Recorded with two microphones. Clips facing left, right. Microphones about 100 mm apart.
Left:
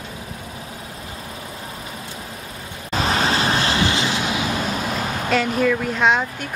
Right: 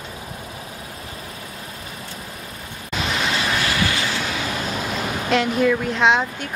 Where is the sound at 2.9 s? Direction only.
40° left (ahead or behind); by 4.3 s 20° left (ahead or behind).